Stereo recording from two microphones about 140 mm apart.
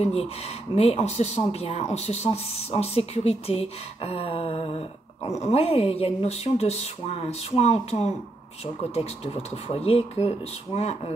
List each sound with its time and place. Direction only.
0.0 s speech: 45° left (ahead or behind)